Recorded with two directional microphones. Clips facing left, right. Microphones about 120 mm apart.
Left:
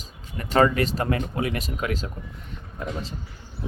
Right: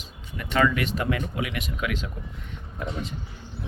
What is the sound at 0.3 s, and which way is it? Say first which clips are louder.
Speech: left 3 dB; 40° left (ahead or behind).